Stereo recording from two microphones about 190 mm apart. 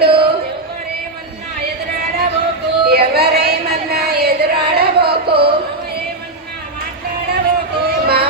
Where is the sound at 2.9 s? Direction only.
55° right (ahead or behind).